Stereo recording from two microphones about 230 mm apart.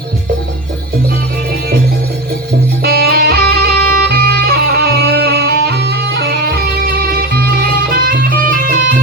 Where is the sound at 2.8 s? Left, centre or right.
Right.